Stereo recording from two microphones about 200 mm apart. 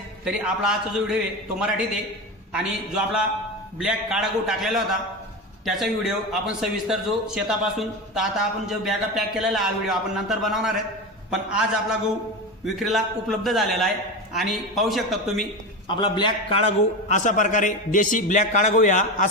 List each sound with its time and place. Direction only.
0.3 s a man's voice: 5° right (ahead or behind)
16.0 s a man's voice: 25° left (ahead or behind); by 19.3 s 40° left (ahead or behind)